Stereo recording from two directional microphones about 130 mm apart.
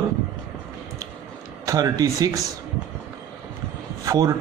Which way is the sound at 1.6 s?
25° right (ahead or behind).